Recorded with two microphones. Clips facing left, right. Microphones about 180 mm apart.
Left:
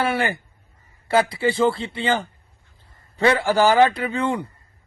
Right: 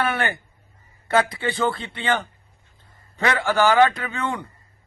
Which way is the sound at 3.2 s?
35° left (ahead or behind).